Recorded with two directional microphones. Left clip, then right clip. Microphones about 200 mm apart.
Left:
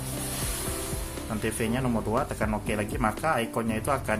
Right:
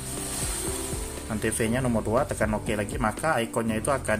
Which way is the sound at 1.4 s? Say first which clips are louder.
Right 3 dB; 15° right (ahead or behind).